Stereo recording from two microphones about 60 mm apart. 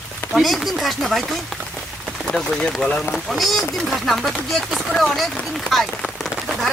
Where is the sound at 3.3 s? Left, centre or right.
Centre.